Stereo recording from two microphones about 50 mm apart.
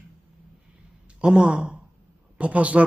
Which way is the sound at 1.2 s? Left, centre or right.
Centre.